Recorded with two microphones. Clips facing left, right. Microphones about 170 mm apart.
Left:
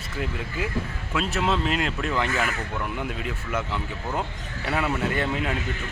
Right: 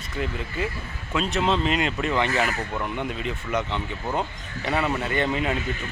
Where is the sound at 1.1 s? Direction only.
5° left (ahead or behind).